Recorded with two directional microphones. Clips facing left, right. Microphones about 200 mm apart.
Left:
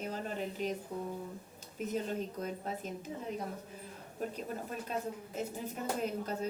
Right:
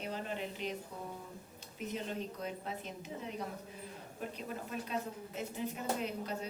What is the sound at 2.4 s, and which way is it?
Speech, 45° left (ahead or behind).